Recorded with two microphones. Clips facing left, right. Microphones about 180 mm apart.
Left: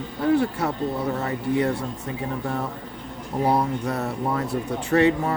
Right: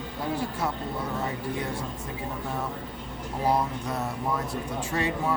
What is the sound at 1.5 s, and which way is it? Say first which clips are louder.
Speech: left 9 dB; 70° left (ahead or behind).